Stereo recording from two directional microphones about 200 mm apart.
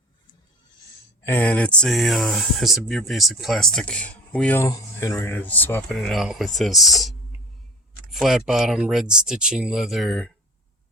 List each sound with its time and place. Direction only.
1.2 s speech: 10° left (ahead or behind)